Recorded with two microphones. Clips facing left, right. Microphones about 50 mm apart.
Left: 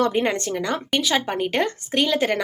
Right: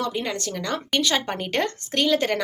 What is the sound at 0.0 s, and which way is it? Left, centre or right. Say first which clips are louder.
Speech: left 6 dB; left.